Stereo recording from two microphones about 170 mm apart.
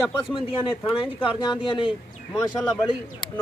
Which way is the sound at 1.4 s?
30° left (ahead or behind).